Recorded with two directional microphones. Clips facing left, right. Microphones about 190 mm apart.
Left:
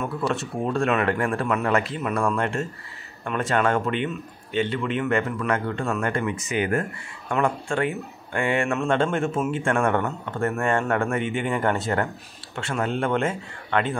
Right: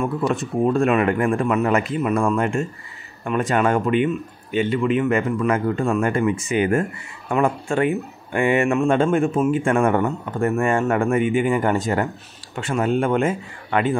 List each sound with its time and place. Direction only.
0.7 s speech: 10° right (ahead or behind)
2.2 s a man's voice: 5° right (ahead or behind)
6.1 s a man's voice: 25° right (ahead or behind); by 12.1 s 5° right (ahead or behind)
12.5 s speech: 15° right (ahead or behind)